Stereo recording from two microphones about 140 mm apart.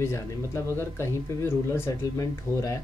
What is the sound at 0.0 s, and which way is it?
Speech, 20° left (ahead or behind).